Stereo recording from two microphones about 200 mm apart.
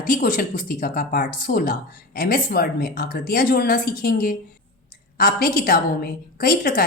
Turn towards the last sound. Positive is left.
turn(degrees=45)  # may be behind; listen again after turning